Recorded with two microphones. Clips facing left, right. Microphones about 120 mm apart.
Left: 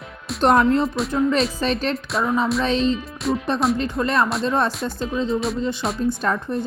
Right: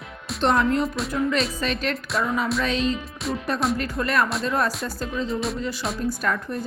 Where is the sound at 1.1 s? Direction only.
25° left (ahead or behind).